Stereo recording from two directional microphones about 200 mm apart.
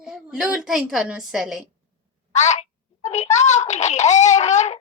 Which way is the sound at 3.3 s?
35° left (ahead or behind).